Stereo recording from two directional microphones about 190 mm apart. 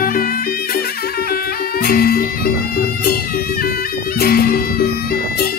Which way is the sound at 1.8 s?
50° left (ahead or behind).